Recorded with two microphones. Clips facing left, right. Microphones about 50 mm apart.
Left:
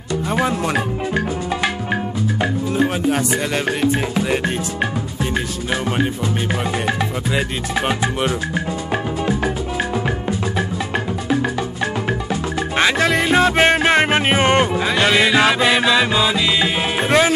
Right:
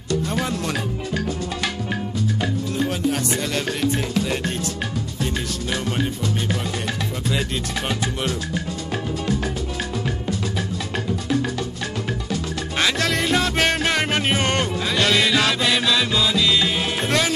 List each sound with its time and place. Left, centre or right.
0.1 s speech: left
2.4 s music: left
6.9 s music: left
12.1 s music: left